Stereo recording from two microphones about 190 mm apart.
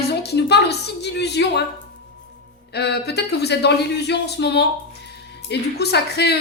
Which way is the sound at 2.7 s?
60° left (ahead or behind).